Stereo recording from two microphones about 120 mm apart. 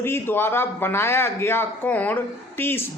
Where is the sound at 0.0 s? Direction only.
20° left (ahead or behind).